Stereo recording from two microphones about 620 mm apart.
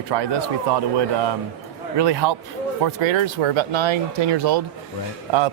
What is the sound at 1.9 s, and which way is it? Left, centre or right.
Speech, right.